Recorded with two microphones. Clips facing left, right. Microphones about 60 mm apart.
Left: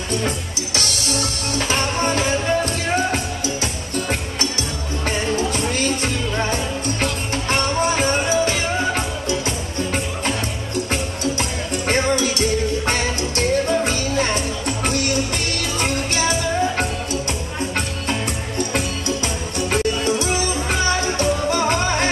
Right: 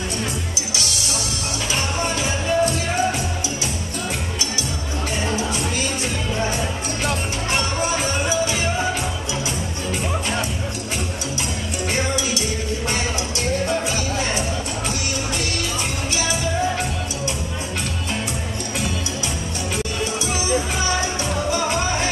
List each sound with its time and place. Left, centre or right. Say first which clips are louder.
0.7 s music: left 5 dB; left
7.5 s music: left 3 dB; left
11.9 s music: left 5 dB; left
15.8 s music: left 4 dB; left
20.7 s music: left 3 dB; left